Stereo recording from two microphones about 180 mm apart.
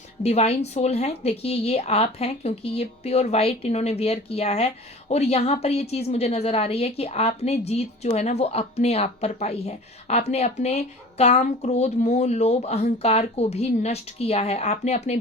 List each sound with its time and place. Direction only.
0.2 s a woman's voice: 35° left (ahead or behind)